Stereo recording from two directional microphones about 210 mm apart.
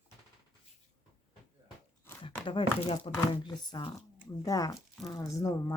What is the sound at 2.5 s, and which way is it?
Speech, 25° left (ahead or behind).